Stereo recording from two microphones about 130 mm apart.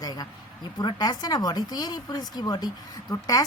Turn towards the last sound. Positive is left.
turn(degrees=30)  # may be behind; listen again after turning